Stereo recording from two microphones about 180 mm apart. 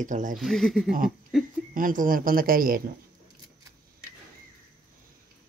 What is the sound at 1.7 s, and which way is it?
Speech, 50° right (ahead or behind).